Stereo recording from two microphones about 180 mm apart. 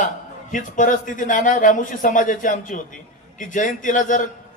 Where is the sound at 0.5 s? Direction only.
45° left (ahead or behind).